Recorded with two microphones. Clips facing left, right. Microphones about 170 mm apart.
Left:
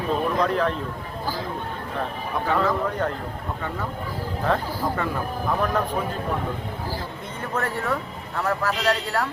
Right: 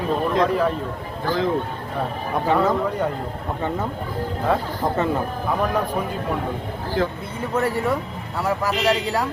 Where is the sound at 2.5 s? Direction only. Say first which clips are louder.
Right 3 dB; 20° right (ahead or behind).